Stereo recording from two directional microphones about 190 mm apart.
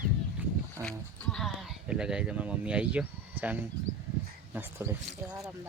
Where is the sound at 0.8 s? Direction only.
5° left (ahead or behind).